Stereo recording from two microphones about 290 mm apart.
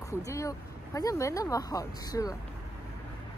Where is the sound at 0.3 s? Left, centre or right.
Centre.